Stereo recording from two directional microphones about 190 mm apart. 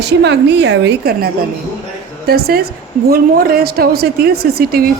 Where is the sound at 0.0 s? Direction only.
65° right (ahead or behind).